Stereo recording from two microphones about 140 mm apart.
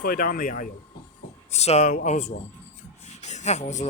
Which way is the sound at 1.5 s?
50° left (ahead or behind).